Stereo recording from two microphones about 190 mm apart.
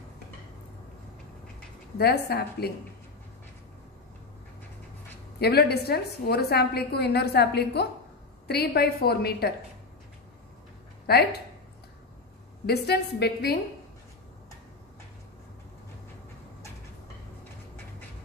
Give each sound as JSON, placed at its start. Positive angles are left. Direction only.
{"t": 2.0, "sound": "a woman's voice", "side_deg": 60}
{"t": 5.4, "sound": "a woman's voice", "side_deg": 55}
{"t": 11.1, "sound": "a woman's voice", "side_deg": 55}
{"t": 12.6, "sound": "a woman's voice", "side_deg": 60}